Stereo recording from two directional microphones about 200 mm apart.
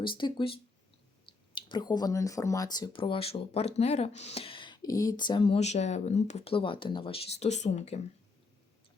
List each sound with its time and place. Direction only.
0.0 s speech: 25° left (ahead or behind)